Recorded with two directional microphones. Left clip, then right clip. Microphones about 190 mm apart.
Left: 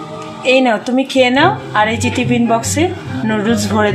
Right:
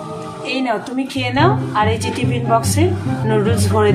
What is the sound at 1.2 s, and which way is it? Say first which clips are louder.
Speech: left 5 dB; 55° left (ahead or behind).